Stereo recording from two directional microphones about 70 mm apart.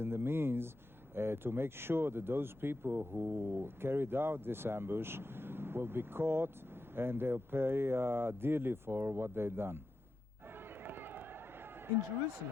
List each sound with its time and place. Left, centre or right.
0.0 s a sound: right
1.1 s speech: right
10.8 s run: right